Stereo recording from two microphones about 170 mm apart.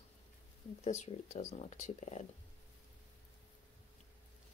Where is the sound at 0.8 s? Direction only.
45° left (ahead or behind).